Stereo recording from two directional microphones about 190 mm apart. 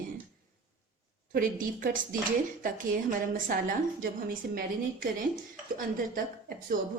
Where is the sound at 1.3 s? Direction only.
45° right (ahead or behind).